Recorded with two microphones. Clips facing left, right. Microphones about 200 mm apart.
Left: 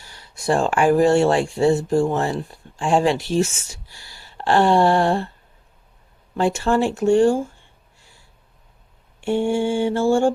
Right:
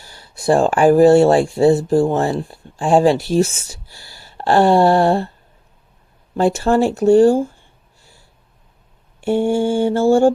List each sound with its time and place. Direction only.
0.0 s speech: 35° right (ahead or behind)
6.3 s speech: 40° right (ahead or behind)
9.2 s speech: 40° right (ahead or behind)